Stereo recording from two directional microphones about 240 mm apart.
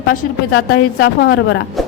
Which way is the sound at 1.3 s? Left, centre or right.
Left.